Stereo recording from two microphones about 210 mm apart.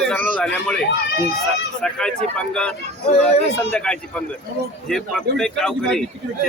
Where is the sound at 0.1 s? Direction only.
5° left (ahead or behind).